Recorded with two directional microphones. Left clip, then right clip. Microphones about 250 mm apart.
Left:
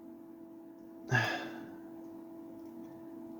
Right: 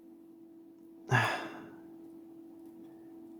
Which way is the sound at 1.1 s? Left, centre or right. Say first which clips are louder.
Right 2 dB; right.